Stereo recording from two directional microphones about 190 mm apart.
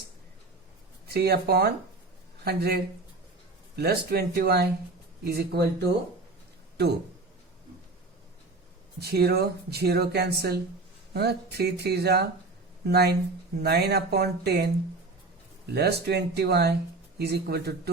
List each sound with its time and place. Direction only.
1.0 s speech: 55° right (ahead or behind)
9.0 s speech: 55° right (ahead or behind)